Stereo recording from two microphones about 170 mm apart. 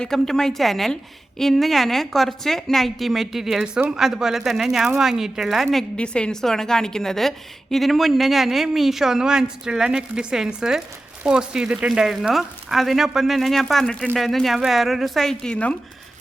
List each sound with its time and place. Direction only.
0.0 s a woman's voice: 5° left (ahead or behind)